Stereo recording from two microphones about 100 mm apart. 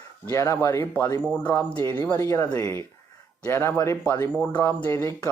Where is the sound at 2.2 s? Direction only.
35° left (ahead or behind).